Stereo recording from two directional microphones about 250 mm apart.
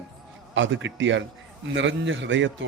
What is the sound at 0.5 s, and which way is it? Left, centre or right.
A man's voice, right.